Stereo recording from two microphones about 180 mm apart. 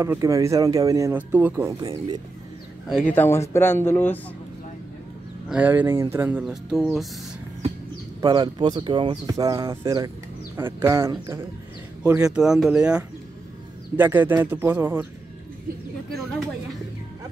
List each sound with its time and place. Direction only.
0.0 s speech: 15° right (ahead or behind)
2.9 s speech: 5° left (ahead or behind)
5.5 s speech: 10° right (ahead or behind)
8.2 s speech: 20° right (ahead or behind)
12.3 s speech: 5° right (ahead or behind)